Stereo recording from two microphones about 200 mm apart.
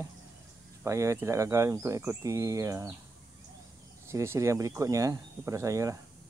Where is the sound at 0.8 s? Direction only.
15° right (ahead or behind).